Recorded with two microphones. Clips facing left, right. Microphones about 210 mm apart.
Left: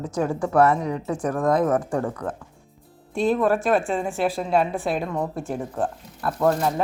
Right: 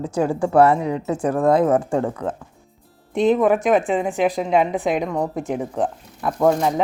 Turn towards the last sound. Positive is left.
turn(degrees=-15)  # may be behind; listen again after turning